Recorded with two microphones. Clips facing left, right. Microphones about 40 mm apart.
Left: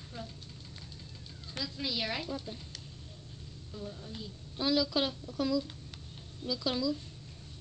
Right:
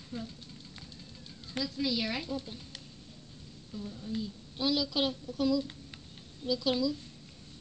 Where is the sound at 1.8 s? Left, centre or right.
Centre.